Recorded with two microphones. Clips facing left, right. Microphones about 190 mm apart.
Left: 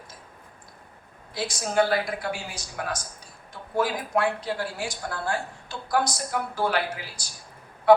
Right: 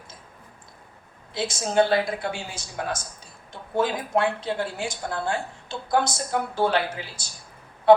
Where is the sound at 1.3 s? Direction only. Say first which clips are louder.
Right 2 dB; 25° right (ahead or behind).